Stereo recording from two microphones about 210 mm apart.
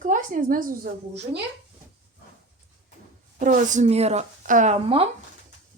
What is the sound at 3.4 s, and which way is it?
A woman's voice, 40° right (ahead or behind).